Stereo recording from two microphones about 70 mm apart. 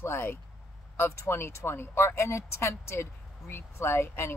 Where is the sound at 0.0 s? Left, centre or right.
Left.